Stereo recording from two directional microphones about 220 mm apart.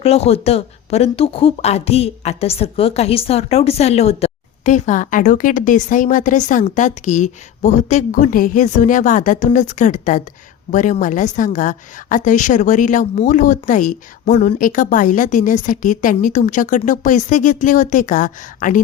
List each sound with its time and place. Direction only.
0.0 s a woman's voice: 30° left (ahead or behind)